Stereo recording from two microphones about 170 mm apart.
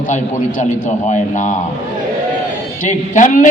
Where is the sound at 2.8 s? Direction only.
50° left (ahead or behind).